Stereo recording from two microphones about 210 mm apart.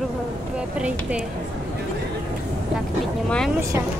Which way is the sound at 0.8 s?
5° right (ahead or behind).